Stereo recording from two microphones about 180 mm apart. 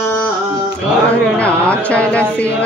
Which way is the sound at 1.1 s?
5° left (ahead or behind).